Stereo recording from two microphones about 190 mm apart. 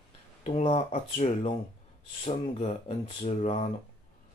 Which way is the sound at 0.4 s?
30° left (ahead or behind).